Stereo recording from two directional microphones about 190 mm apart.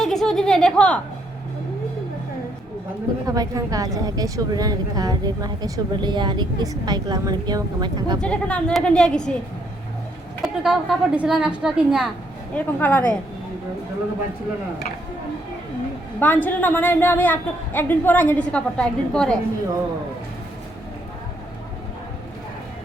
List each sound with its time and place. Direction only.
0.0 s a woman's voice: centre (ahead or behind)
3.2 s a woman's voice: 20° right (ahead or behind)
8.2 s a woman's voice: 5° left (ahead or behind)
10.4 s a woman's voice: centre (ahead or behind)
12.5 s a woman's voice: 10° left (ahead or behind)
16.2 s a woman's voice: 10° left (ahead or behind)